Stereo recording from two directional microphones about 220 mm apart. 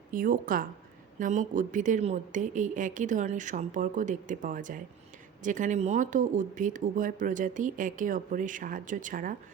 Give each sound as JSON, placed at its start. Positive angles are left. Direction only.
{"t": 0.1, "sound": "speech", "side_deg": -40}